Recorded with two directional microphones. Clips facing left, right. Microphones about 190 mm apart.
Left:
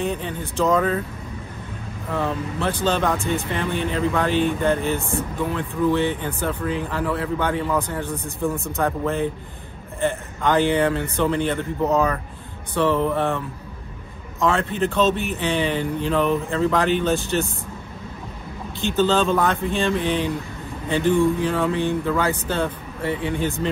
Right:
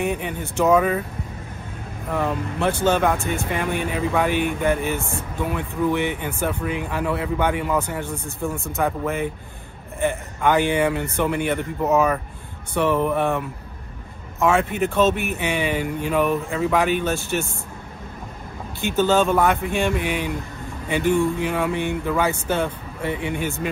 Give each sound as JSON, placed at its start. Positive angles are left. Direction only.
{"t": 0.0, "sound": "speech", "side_deg": -15}
{"t": 2.8, "sound": "speech", "side_deg": -15}
{"t": 8.4, "sound": "speech", "side_deg": 0}
{"t": 8.8, "sound": "speech", "side_deg": -15}
{"t": 14.4, "sound": "speech", "side_deg": -15}
{"t": 18.8, "sound": "speech", "side_deg": -15}